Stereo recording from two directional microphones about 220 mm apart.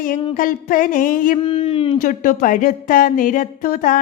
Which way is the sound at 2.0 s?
40° left (ahead or behind).